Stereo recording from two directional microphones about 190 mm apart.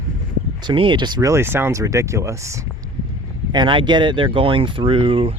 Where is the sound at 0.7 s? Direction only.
25° right (ahead or behind).